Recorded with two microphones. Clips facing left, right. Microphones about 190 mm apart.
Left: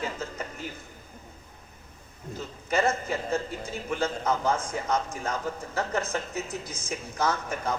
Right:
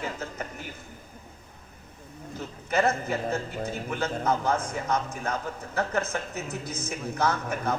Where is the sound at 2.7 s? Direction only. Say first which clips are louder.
Right 1 dB; 60° right (ahead or behind).